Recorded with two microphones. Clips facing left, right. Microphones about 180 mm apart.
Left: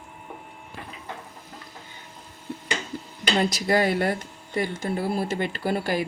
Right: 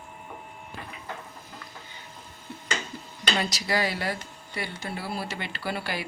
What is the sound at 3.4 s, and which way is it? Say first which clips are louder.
Speech: left 7 dB; 50° left (ahead or behind).